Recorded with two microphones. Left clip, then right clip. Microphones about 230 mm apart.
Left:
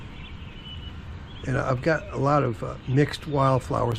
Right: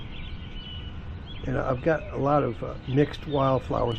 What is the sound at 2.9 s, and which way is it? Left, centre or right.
Speech, centre.